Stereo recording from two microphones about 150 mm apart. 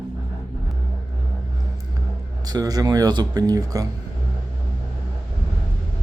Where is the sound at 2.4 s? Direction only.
25° right (ahead or behind).